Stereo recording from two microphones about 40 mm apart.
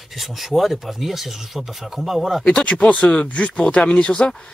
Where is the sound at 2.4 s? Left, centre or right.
Left.